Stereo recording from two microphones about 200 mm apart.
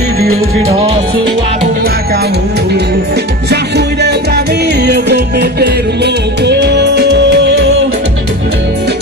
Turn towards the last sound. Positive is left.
turn(degrees=-60)  # may be behind; listen again after turning